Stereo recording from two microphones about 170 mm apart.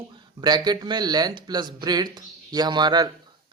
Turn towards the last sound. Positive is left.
turn(degrees=-25)  # may be behind; listen again after turning